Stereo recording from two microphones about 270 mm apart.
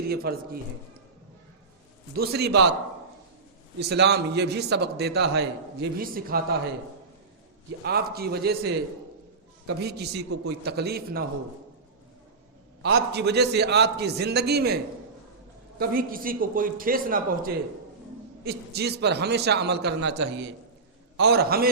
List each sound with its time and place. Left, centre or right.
0.1 s a man's voice: right
2.1 s a man's voice: right
3.8 s a man's voice: right
7.9 s a man's voice: right
9.8 s a man's voice: right
12.8 s a man's voice: right
15.8 s a man's voice: right